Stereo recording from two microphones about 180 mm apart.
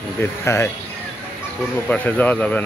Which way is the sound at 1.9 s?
10° left (ahead or behind).